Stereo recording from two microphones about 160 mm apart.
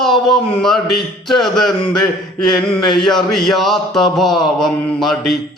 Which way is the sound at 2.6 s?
5° left (ahead or behind).